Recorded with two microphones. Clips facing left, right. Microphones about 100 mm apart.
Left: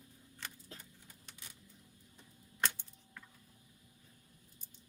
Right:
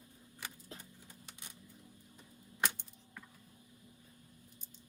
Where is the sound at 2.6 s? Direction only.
10° right (ahead or behind).